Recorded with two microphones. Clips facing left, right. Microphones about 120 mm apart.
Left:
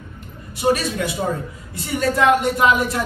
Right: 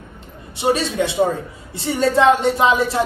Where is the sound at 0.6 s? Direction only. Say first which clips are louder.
Right 1 dB; 25° right (ahead or behind).